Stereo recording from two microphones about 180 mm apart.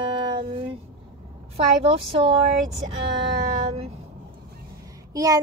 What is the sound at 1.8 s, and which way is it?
Speech, 30° right (ahead or behind).